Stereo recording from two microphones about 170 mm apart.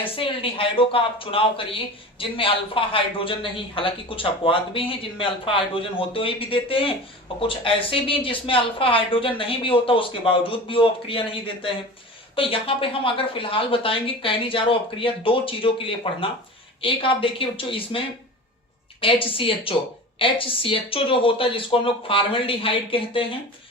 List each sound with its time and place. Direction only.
0.0 s speech: 30° left (ahead or behind)